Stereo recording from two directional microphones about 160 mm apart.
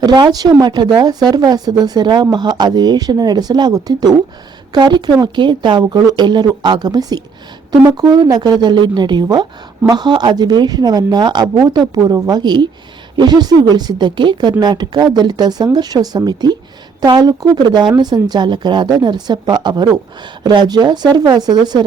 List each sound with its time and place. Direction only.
0.0 s speech: 25° right (ahead or behind)